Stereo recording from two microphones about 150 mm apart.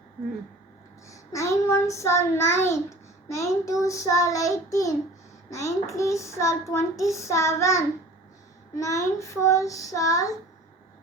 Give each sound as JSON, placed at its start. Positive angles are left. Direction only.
{"t": 1.0, "sound": "child singing", "side_deg": 20}